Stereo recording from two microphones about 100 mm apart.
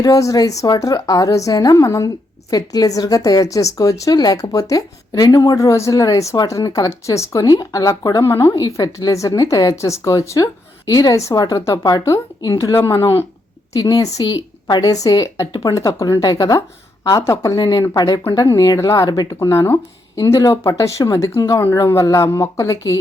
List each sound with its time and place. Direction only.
0.0 s a woman's voice: 35° left (ahead or behind)
13.7 s a woman's voice: 40° left (ahead or behind)
17.6 s a woman's voice: 45° left (ahead or behind)
19.0 s a woman's voice: 45° left (ahead or behind)